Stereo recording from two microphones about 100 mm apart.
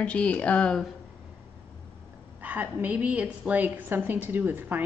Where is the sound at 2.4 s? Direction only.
20° right (ahead or behind).